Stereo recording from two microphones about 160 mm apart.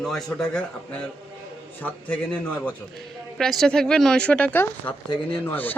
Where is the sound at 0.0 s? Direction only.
Centre (ahead or behind).